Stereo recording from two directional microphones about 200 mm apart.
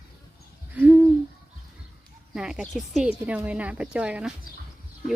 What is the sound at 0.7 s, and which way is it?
Hoot, 10° right (ahead or behind).